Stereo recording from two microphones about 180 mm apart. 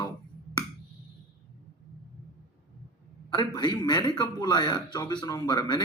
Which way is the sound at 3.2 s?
25° left (ahead or behind).